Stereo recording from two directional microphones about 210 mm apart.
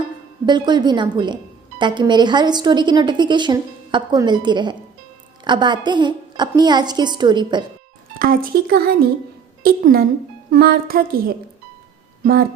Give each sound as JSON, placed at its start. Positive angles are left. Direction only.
{"t": 0.4, "sound": "speech", "side_deg": -20}
{"t": 8.2, "sound": "speech", "side_deg": -45}